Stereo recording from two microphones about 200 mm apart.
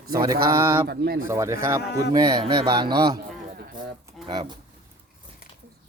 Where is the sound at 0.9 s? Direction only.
50° right (ahead or behind).